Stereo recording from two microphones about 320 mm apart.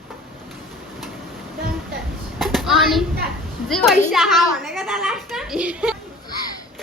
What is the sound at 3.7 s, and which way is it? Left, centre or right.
A woman's voice, centre.